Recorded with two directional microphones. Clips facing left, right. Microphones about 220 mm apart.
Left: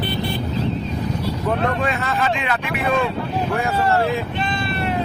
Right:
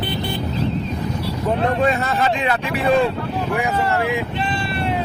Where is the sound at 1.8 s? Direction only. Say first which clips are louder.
Right 3 dB; 40° right (ahead or behind).